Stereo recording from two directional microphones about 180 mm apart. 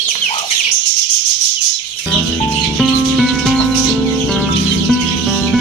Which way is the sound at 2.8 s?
Centre (ahead or behind).